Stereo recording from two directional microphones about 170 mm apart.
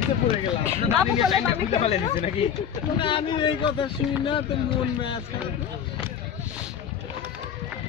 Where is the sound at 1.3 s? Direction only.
35° left (ahead or behind).